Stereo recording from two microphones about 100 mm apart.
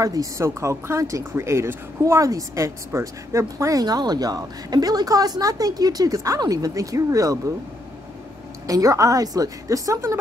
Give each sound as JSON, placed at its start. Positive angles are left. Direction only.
{"t": 0.0, "sound": "speech", "side_deg": -35}
{"t": 8.6, "sound": "speech", "side_deg": -35}